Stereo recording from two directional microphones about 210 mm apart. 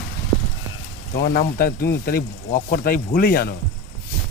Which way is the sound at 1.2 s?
45° left (ahead or behind).